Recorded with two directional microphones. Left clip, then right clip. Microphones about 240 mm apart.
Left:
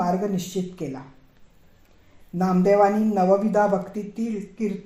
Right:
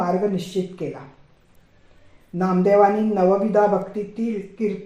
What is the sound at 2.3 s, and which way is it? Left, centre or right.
Speech, left.